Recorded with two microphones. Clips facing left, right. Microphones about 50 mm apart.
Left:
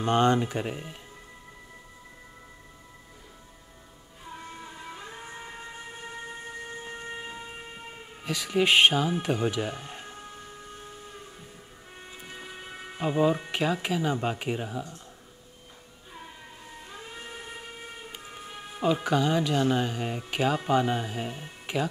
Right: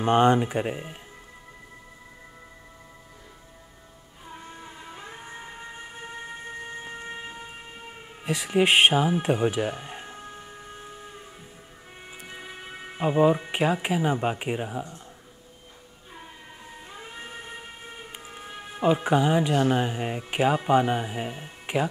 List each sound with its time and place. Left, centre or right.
0.0 s speech: right
4.6 s emergency vehicle: centre
6.0 s siren: centre
8.2 s speech: right
9.2 s music: right
12.1 s speech: centre
16.8 s a sound: centre
18.1 s emergency vehicle: centre
18.4 s speech: centre